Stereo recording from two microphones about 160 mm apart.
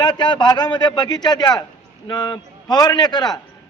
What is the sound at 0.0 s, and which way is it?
A man's voice, 30° left (ahead or behind).